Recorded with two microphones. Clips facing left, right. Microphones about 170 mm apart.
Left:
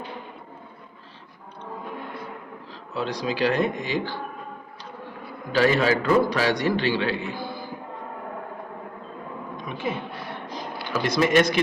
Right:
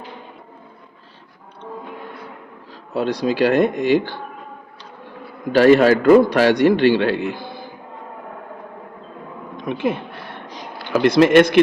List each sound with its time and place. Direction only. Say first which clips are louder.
2.9 s speech: right 7 dB; 45° right (ahead or behind)
5.5 s a man's voice: right 9 dB; 55° right (ahead or behind)
9.7 s speech: right 12 dB; 50° right (ahead or behind)
10.9 s a man's voice: right 8 dB; 60° right (ahead or behind)